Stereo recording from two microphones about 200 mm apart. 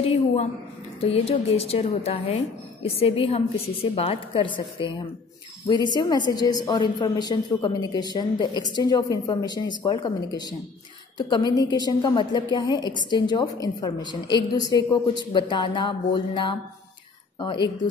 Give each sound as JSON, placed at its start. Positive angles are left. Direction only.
{"t": 1.0, "sound": "a woman's voice", "side_deg": 30}